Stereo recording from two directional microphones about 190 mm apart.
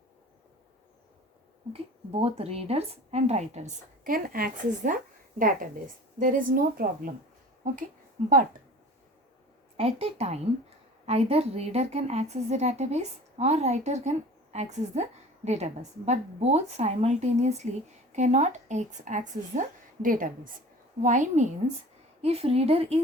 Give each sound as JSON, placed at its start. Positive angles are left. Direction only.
{"t": 1.7, "sound": "speech", "side_deg": -30}
{"t": 9.7, "sound": "speech", "side_deg": -35}